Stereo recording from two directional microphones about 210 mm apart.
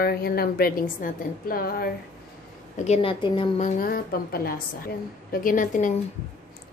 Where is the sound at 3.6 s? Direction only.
40° left (ahead or behind).